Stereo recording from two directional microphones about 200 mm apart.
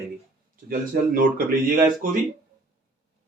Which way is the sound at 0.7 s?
45° right (ahead or behind).